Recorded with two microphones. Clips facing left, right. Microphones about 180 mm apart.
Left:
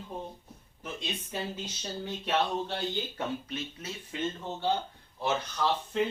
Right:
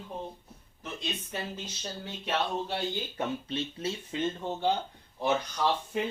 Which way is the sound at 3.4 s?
30° right (ahead or behind).